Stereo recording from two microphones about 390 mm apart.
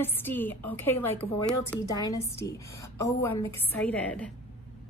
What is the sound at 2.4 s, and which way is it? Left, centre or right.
Speech, left.